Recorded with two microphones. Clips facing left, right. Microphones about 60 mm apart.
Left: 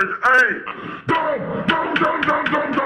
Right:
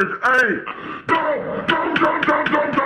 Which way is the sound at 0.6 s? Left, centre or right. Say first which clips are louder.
Even; centre.